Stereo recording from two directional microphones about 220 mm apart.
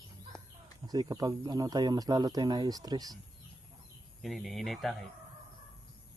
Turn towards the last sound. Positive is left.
turn(degrees=0)  # may be behind; listen again after turning